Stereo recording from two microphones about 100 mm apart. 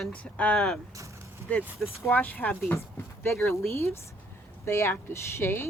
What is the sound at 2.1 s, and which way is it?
Speech, 15° left (ahead or behind).